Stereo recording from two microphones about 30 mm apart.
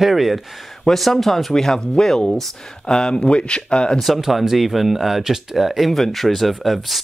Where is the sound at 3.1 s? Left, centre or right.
Left.